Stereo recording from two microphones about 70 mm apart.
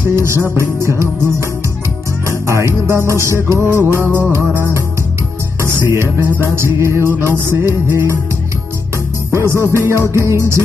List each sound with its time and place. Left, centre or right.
0.1 s music: right
5.6 s music: right
9.3 s music: right